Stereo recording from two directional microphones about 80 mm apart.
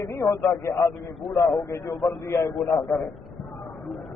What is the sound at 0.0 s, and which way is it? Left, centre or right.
Speech, left.